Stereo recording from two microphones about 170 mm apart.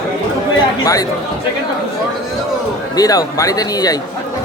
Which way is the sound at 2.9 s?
20° left (ahead or behind).